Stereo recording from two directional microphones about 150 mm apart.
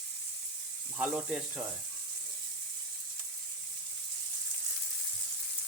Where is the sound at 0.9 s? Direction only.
10° right (ahead or behind).